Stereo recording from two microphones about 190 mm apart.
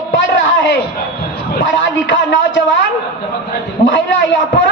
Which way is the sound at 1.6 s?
75° left (ahead or behind).